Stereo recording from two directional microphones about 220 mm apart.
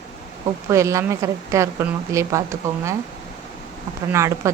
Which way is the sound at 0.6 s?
15° right (ahead or behind).